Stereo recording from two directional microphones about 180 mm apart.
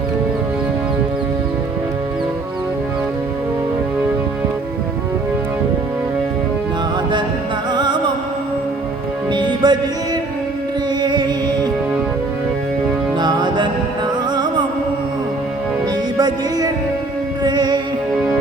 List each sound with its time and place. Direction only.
7.7 s music: 25° right (ahead or behind)
9.3 s music: 25° right (ahead or behind)
11.0 s music: 25° right (ahead or behind)
13.1 s music: 25° right (ahead or behind)
16.1 s music: 20° right (ahead or behind)